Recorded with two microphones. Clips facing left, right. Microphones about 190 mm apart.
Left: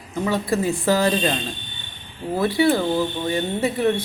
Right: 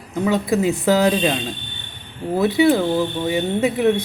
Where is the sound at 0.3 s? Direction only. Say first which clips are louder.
Right 3 dB; 15° right (ahead or behind).